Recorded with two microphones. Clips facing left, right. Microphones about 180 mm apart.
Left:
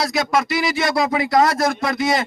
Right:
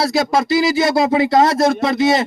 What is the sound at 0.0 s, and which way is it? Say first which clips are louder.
A man's voice: right 3 dB; 25° right (ahead or behind).